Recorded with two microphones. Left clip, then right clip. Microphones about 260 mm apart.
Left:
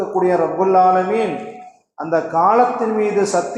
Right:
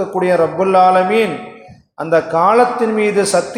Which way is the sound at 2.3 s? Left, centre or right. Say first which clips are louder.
Right 1 dB; right.